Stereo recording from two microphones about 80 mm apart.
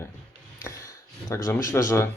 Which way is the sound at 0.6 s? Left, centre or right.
Left.